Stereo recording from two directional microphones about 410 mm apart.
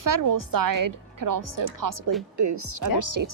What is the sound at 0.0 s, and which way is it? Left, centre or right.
A woman's voice, right.